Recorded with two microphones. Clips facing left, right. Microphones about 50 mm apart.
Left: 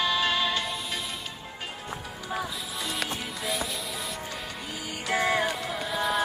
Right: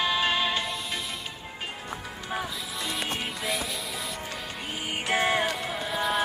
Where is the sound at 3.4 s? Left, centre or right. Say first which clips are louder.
Left 1 dB; centre.